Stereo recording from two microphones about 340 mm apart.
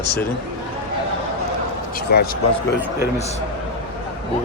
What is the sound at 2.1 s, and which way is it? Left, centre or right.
Speech, left.